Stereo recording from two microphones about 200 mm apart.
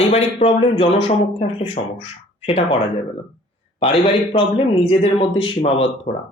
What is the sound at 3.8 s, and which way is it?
Speech, 25° left (ahead or behind).